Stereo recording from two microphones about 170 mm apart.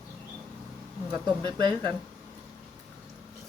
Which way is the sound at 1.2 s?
25° right (ahead or behind).